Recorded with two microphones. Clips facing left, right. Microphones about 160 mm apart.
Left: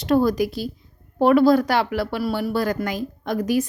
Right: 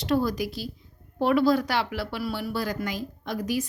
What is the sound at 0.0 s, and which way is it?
Speech, 50° left (ahead or behind).